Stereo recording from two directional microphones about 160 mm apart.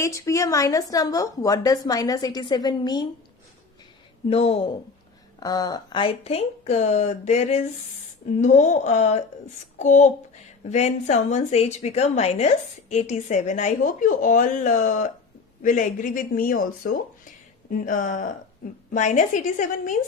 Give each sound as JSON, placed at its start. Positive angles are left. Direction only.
{"t": 0.0, "sound": "a woman's voice", "side_deg": 20}
{"t": 4.3, "sound": "speech", "side_deg": 40}
{"t": 5.4, "sound": "speech", "side_deg": 25}